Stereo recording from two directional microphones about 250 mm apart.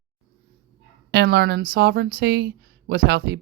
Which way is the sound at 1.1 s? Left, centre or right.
Right.